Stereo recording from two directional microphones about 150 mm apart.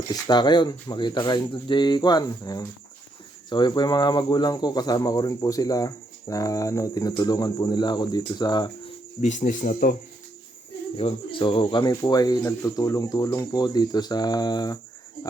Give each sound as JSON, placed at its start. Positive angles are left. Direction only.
{"t": 0.1, "sound": "speech", "side_deg": 30}
{"t": 9.2, "sound": "speech", "side_deg": 55}
{"t": 10.9, "sound": "speech", "side_deg": 35}